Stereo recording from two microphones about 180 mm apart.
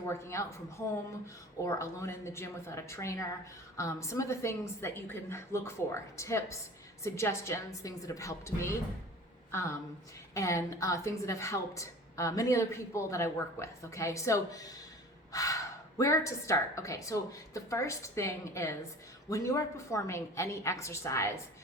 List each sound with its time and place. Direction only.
0.0 s a woman's voice: 15° left (ahead or behind)
15.3 s gasp: 20° left (ahead or behind)
16.0 s a woman's voice: 20° left (ahead or behind)